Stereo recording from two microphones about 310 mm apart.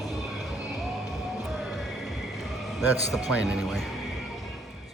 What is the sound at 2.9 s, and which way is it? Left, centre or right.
Speech, centre.